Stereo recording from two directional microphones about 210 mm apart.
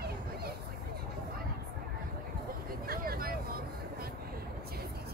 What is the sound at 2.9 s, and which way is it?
Vehicle, 45° right (ahead or behind).